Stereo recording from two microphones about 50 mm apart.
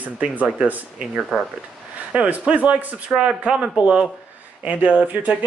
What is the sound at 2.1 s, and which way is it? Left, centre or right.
Speech, right.